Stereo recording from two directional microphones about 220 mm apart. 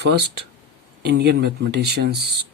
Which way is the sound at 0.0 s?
50° right (ahead or behind).